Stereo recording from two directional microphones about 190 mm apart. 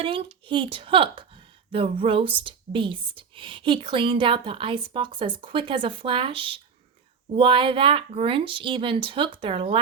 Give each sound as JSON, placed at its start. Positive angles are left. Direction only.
{"t": 0.0, "sound": "speech", "side_deg": -30}